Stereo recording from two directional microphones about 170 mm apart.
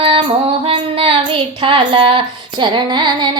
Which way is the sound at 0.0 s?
30° right (ahead or behind).